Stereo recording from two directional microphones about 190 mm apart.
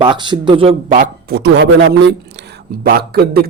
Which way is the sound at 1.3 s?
60° right (ahead or behind).